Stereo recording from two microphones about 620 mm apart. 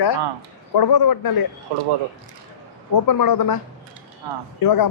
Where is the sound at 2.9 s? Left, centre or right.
Left.